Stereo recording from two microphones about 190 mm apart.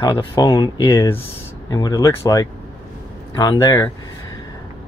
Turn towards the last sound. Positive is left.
turn(degrees=15)  # may be behind; listen again after turning